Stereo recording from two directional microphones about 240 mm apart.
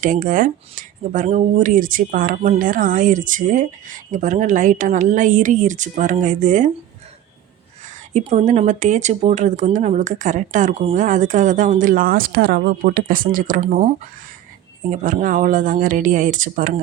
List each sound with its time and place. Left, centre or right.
0.0 s speech: right
8.1 s speech: right